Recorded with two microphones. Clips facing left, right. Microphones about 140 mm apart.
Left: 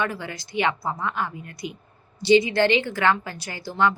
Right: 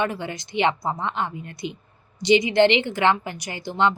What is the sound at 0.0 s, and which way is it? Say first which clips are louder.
A woman's voice: right 2 dB; 20° right (ahead or behind).